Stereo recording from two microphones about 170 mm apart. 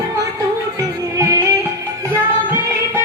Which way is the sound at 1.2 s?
15° right (ahead or behind).